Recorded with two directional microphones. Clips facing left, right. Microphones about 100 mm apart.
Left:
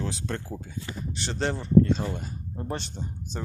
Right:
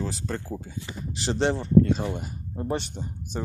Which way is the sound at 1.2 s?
30° right (ahead or behind).